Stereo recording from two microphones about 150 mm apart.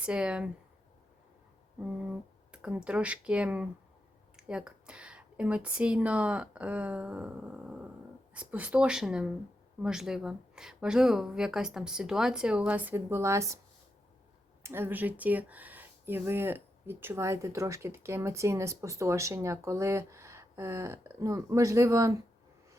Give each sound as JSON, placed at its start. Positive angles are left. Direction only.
{"t": 0.0, "sound": "speech", "side_deg": -5}
{"t": 2.5, "sound": "a woman's voice", "side_deg": -10}
{"t": 14.6, "sound": "speech", "side_deg": -15}